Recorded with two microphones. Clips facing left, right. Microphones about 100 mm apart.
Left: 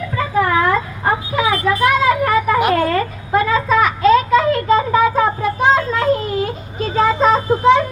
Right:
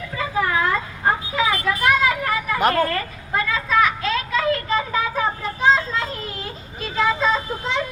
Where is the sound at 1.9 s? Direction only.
50° left (ahead or behind).